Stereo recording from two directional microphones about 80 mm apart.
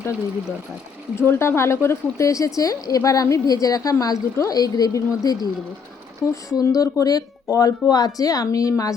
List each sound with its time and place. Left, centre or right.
1.1 s speech: left